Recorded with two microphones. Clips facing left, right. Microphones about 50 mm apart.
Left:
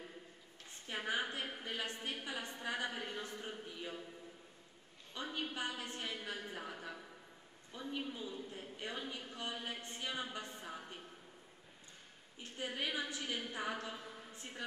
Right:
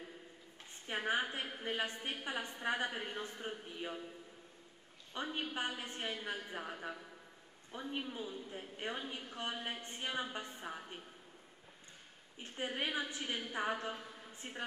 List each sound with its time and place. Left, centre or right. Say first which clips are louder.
0.8 s a sound: right 3 dB; right
2.0 s a woman's voice: right 2 dB; right
5.1 s a woman's voice: right 2 dB; right
12.5 s a woman's voice: right 2 dB; right